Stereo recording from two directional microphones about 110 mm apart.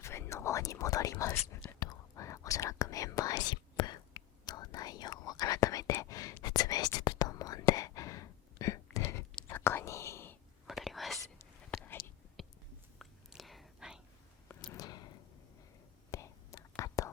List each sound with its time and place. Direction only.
0.0 s whispering: 25° left (ahead or behind)
1.6 s whispering: 35° left (ahead or behind)
10.7 s whispering: centre (ahead or behind)
13.0 s whispering: centre (ahead or behind)
14.7 s a sound: 35° left (ahead or behind)
16.1 s whispering: 30° left (ahead or behind)